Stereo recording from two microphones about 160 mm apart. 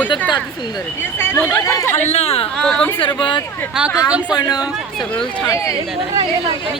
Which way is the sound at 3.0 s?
30° left (ahead or behind).